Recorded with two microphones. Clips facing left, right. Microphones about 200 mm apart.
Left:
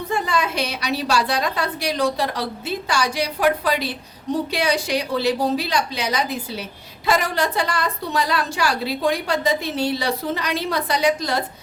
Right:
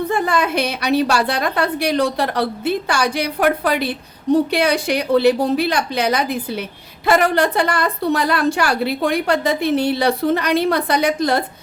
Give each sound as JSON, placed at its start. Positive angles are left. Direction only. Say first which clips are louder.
{"t": 0.1, "sound": "a woman's voice", "louder": "even", "side_deg": -55}